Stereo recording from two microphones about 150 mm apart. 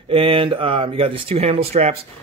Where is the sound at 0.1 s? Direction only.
40° right (ahead or behind).